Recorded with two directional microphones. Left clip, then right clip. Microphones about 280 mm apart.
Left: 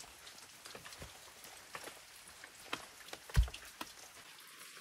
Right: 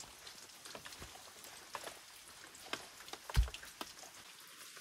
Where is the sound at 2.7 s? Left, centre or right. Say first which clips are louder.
Left 1 dB; centre.